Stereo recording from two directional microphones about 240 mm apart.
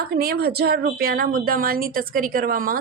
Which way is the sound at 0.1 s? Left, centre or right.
Right.